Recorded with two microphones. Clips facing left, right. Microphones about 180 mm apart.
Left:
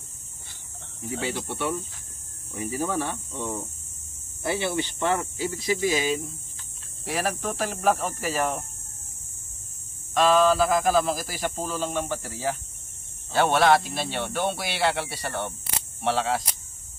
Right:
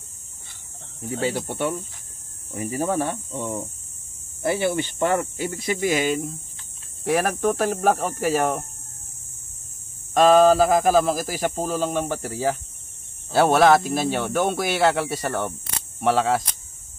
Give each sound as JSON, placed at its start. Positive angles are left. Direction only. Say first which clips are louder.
{"t": 1.1, "sound": "speech", "louder": "right 5 dB", "side_deg": -45}
{"t": 4.5, "sound": "speech", "louder": "right 4 dB", "side_deg": -50}
{"t": 10.1, "sound": "speech", "louder": "right 5 dB", "side_deg": -45}